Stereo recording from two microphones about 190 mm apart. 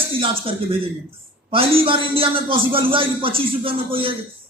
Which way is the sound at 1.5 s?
30° right (ahead or behind).